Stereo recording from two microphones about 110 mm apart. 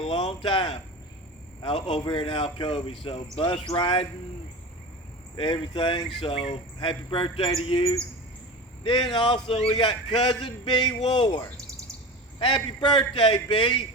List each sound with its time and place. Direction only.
0.0 s speech: 55° left (ahead or behind)
5.4 s speech: 45° left (ahead or behind)
6.2 s speech: 60° left (ahead or behind)
9.7 s speech: 45° left (ahead or behind)